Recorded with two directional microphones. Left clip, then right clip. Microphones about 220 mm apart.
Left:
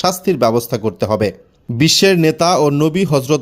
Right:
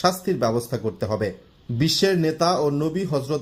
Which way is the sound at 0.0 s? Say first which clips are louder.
Left 7 dB; 30° left (ahead or behind).